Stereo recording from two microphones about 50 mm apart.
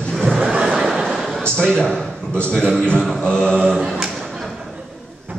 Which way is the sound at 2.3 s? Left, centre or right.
Left.